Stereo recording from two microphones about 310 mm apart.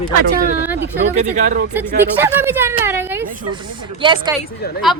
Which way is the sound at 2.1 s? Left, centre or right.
Centre.